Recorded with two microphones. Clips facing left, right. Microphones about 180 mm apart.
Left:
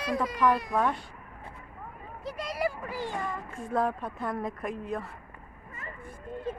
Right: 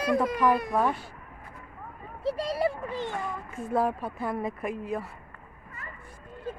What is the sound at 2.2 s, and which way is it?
Speech, 30° right (ahead or behind).